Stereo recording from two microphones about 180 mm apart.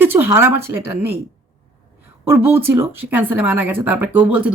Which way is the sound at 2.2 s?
15° right (ahead or behind).